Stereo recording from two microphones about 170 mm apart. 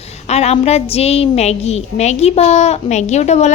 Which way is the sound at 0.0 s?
40° left (ahead or behind).